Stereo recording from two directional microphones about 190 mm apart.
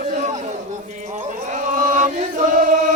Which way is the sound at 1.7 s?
40° right (ahead or behind).